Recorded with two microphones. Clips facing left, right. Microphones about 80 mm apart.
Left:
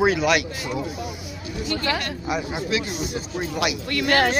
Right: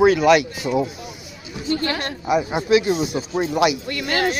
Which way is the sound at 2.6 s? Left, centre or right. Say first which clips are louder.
Right 12 dB; centre.